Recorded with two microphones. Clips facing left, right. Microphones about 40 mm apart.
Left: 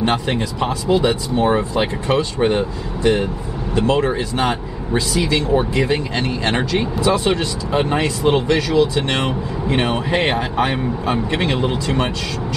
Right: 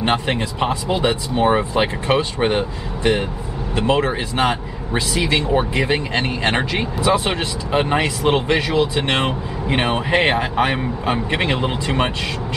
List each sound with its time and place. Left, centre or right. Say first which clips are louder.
0.0 s speech: even; right